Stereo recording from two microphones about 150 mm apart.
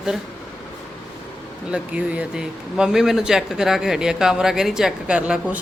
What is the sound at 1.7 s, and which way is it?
Speech, 10° right (ahead or behind).